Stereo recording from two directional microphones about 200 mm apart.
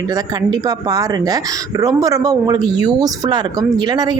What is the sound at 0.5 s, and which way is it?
Speech, 20° right (ahead or behind).